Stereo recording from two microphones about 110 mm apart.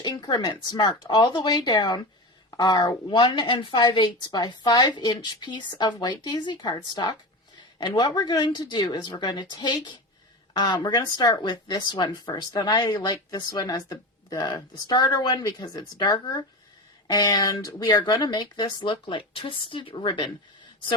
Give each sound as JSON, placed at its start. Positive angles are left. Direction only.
{"t": 0.0, "sound": "a woman's voice", "side_deg": 40}
{"t": 15.8, "sound": "a woman's voice", "side_deg": 45}
{"t": 16.1, "sound": "speech", "side_deg": 35}